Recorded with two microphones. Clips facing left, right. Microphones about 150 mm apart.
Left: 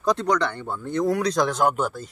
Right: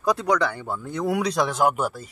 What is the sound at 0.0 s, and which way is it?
A man's voice, 5° right (ahead or behind).